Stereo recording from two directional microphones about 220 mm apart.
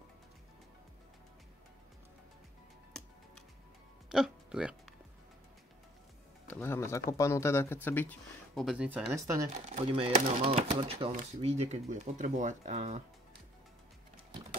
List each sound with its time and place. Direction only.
4.1 s speech: 5° right (ahead or behind)
6.4 s speech: 10° left (ahead or behind); by 9.5 s 15° right (ahead or behind)
9.8 s speech: 25° right (ahead or behind)